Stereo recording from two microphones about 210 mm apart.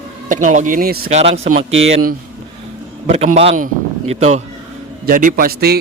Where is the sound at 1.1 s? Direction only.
30° right (ahead or behind).